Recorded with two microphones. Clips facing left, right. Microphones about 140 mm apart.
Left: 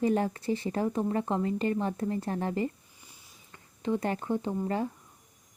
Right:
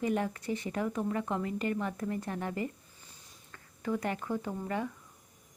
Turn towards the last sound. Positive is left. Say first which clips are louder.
# left 4 dB
turn(degrees=30)  # may be behind; listen again after turning